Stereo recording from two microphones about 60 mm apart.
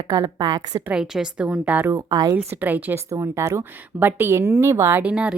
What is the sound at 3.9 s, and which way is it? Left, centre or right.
Speech, right.